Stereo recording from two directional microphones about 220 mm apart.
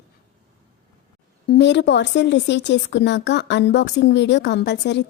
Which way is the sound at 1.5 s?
50° left (ahead or behind).